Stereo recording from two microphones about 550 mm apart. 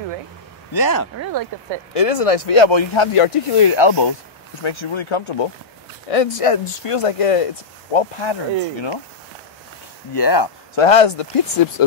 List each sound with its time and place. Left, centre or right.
0.7 s speech: left
2.0 s speech: left
4.6 s speech: left
6.0 s speech: left
7.9 s speech: left
10.1 s speech: left
10.7 s speech: left